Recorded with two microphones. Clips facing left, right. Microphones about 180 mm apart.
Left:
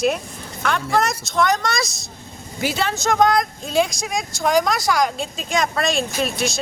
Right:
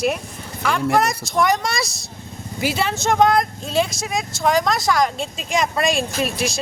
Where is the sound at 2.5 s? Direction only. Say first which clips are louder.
Right 1 dB; 5° right (ahead or behind).